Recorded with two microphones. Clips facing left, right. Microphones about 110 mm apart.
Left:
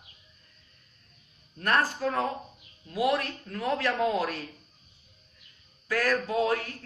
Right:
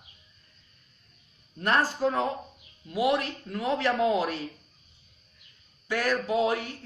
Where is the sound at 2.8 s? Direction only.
10° right (ahead or behind).